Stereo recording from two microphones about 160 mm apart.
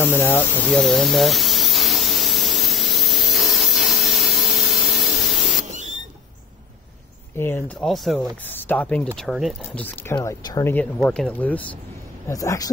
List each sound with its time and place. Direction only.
0.0 s a sound: 15° left (ahead or behind)
7.3 s speech: 15° left (ahead or behind)
7.8 s speech: centre (ahead or behind)
8.5 s speech: 10° left (ahead or behind)
9.6 s speech: 15° left (ahead or behind)
10.1 s speech: 25° left (ahead or behind)
11.1 s speech: 10° left (ahead or behind)
12.3 s speech: 20° left (ahead or behind)